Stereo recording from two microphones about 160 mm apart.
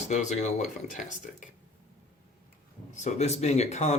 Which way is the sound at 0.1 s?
50° left (ahead or behind).